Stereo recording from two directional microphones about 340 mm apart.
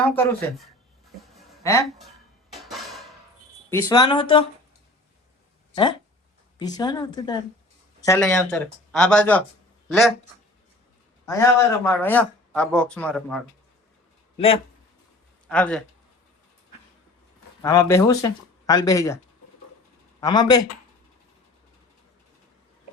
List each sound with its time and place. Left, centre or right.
0.2 s speech: centre
1.2 s music: centre
2.5 s dishes: centre
3.7 s speech: centre
5.7 s speech: centre
11.3 s speech: centre
14.3 s speech: centre
15.4 s speech: centre
17.6 s speech: centre
20.2 s speech: centre